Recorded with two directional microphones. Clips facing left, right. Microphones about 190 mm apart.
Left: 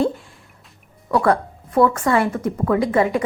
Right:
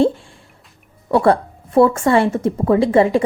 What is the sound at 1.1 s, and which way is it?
Speech, 30° right (ahead or behind).